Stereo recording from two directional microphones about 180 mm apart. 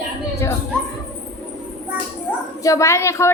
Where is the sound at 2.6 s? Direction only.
15° left (ahead or behind).